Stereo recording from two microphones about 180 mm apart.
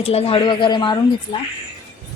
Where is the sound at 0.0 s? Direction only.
35° left (ahead or behind).